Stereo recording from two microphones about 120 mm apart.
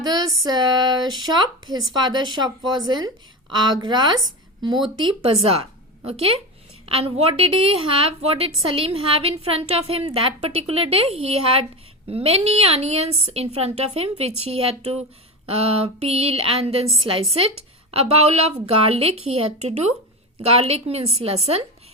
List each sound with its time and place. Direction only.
0.4 s speech: 35° right (ahead or behind)
4.9 s a woman's voice: 45° right (ahead or behind)
6.8 s a woman's voice: 55° right (ahead or behind)
20.5 s a woman's voice: 55° right (ahead or behind)